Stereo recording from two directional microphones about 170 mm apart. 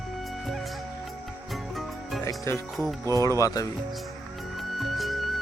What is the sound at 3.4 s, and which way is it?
Speech, 20° left (ahead or behind).